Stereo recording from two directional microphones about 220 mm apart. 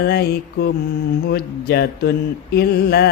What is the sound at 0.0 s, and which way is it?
Mantra, 45° left (ahead or behind).